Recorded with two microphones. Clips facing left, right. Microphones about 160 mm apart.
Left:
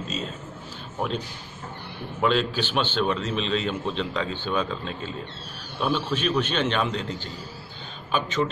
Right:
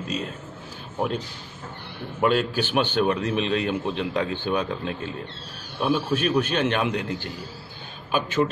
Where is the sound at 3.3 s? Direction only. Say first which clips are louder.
Right 2 dB; 60° right (ahead or behind).